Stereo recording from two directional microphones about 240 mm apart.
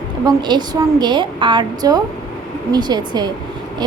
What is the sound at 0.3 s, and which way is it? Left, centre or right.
A woman's voice, centre.